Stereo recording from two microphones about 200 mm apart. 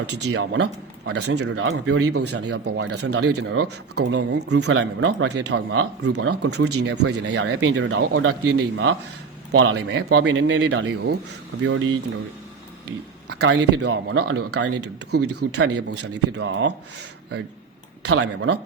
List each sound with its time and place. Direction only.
0.1 s speech: 60° right (ahead or behind); by 2.1 s 90° right
2.2 s speech: 60° right (ahead or behind); by 8.0 s 75° right (ahead or behind)
8.1 s speech: 90° right
8.5 s a man's voice: 70° right (ahead or behind)
9.5 s speech: 90° right; by 11.2 s 55° right (ahead or behind)
11.6 s speech: 90° right
13.4 s speech: 60° right (ahead or behind)
18.1 s speech: 80° right